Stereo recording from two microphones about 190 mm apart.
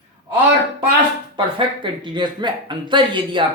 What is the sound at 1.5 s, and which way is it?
Speech, 25° right (ahead or behind).